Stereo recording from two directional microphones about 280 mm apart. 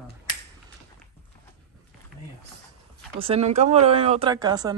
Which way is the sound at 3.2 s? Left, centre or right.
Right.